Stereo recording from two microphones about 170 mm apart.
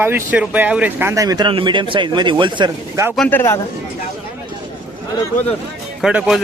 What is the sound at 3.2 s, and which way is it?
Speech, 10° left (ahead or behind).